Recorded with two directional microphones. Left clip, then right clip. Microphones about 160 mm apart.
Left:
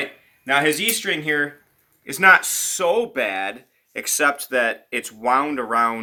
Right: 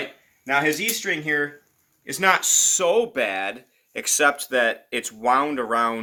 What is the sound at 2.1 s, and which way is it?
Speech, 30° right (ahead or behind).